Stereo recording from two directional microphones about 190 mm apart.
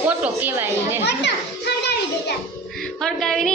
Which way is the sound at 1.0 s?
60° left (ahead or behind).